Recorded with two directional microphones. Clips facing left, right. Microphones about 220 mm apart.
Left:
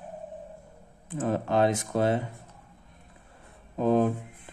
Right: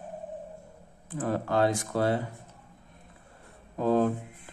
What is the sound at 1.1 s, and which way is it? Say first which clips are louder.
Speech: left 2 dB; 20° left (ahead or behind).